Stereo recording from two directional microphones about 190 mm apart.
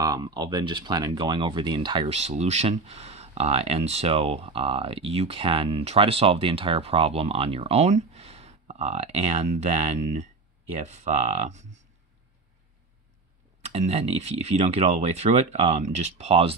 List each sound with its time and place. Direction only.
0.0 s speech: 20° right (ahead or behind); by 11.6 s 35° right (ahead or behind)
13.6 s speech: 35° right (ahead or behind)